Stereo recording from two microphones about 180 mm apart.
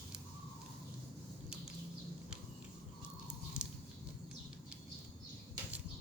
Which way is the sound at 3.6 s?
5° right (ahead or behind).